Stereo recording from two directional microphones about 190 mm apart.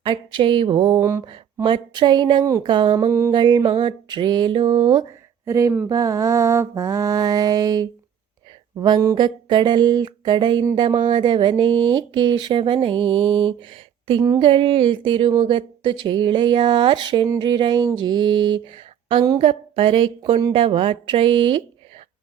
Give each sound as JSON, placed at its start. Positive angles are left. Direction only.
{"t": 0.0, "sound": "speech", "side_deg": -25}
{"t": 5.5, "sound": "mantra", "side_deg": -15}
{"t": 8.7, "sound": "speech", "side_deg": -20}